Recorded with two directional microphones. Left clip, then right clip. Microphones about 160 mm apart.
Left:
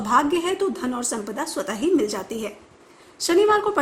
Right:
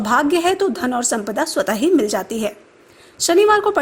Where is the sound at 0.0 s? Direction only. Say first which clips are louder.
Right 4 dB; 40° right (ahead or behind).